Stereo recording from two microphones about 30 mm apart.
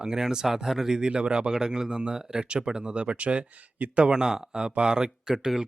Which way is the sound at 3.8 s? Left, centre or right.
Right.